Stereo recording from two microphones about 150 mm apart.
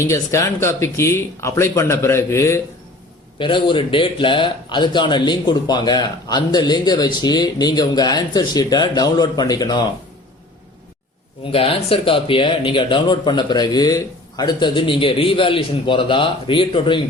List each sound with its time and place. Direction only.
0.0 s speech: 20° left (ahead or behind)
3.3 s speech: 35° left (ahead or behind)
11.5 s speech: 40° left (ahead or behind)